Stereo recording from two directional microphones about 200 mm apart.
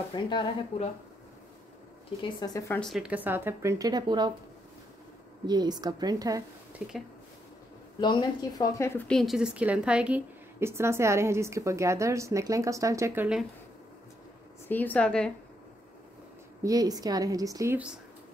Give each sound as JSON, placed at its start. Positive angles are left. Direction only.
{"t": 0.1, "sound": "speech", "side_deg": 25}
{"t": 2.2, "sound": "speech", "side_deg": 20}
{"t": 2.8, "sound": "a woman's voice", "side_deg": 0}
{"t": 5.5, "sound": "a woman's voice", "side_deg": -20}
{"t": 6.8, "sound": "a woman's voice", "side_deg": -5}
{"t": 8.0, "sound": "a woman's voice", "side_deg": 20}
{"t": 14.7, "sound": "a woman's voice", "side_deg": 10}
{"t": 16.6, "sound": "a woman's voice", "side_deg": -20}